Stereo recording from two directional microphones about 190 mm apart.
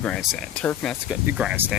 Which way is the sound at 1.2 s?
5° right (ahead or behind).